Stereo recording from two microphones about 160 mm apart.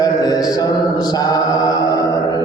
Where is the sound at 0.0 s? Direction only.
25° left (ahead or behind).